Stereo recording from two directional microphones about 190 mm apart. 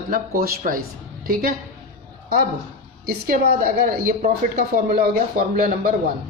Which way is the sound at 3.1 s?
50° right (ahead or behind).